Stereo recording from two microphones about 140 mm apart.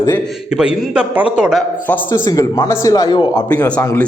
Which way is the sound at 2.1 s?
25° left (ahead or behind).